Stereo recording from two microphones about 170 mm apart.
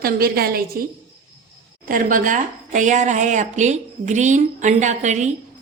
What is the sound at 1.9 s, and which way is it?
A woman's voice, 50° right (ahead or behind).